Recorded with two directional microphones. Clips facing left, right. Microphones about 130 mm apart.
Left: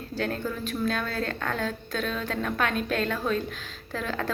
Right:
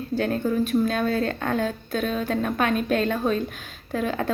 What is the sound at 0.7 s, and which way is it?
A woman's voice, 20° right (ahead or behind).